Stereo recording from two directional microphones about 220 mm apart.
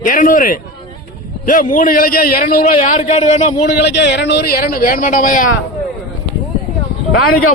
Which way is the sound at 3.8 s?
50° left (ahead or behind).